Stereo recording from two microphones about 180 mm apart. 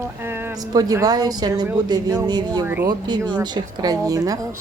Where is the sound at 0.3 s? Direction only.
10° right (ahead or behind).